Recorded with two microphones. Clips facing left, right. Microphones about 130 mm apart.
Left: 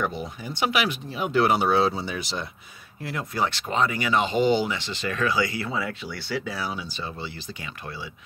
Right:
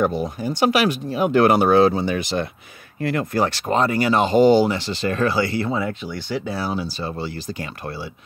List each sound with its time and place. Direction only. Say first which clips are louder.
0.0 s speech: right 8 dB; 40° right (ahead or behind); by 3.3 s 65° right (ahead or behind)
3.3 s speech: right 3 dB; 45° right (ahead or behind)